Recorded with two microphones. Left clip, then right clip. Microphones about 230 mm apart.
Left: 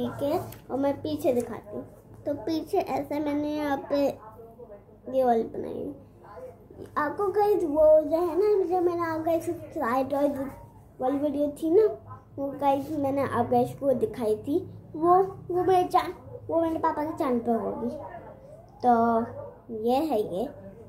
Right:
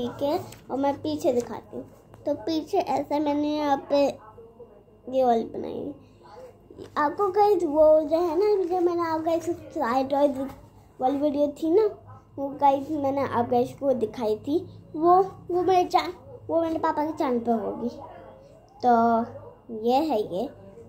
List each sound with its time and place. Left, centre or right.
0.0 s a woman's voice: right
6.9 s a woman's voice: right